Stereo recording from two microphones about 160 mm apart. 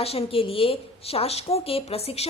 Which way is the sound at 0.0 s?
40° left (ahead or behind).